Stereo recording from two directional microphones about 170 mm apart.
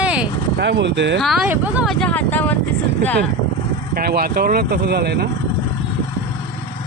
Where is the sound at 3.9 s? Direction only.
65° right (ahead or behind).